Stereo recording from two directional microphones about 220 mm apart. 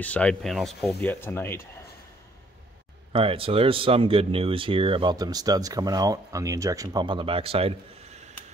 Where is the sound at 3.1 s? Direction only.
25° right (ahead or behind).